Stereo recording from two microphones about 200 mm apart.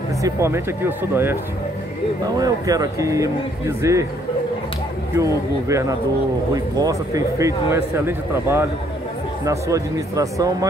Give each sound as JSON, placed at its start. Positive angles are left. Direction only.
{"t": 0.2, "sound": "a man's voice", "side_deg": -15}
{"t": 5.1, "sound": "a man's voice", "side_deg": -15}